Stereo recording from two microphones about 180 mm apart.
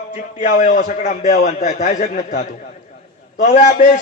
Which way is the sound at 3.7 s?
45° left (ahead or behind).